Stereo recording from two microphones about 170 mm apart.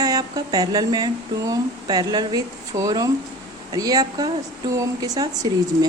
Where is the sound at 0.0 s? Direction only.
20° right (ahead or behind).